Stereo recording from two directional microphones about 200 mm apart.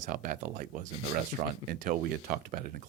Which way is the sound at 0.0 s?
40° right (ahead or behind).